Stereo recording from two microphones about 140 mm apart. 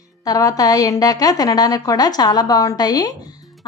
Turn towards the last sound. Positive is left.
turn(degrees=30)  # may be behind; listen again after turning